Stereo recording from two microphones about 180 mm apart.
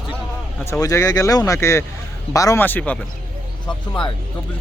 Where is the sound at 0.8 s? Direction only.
20° left (ahead or behind).